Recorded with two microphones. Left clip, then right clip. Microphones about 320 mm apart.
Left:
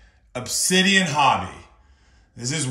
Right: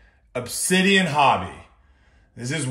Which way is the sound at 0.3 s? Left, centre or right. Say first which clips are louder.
Left 1 dB; centre.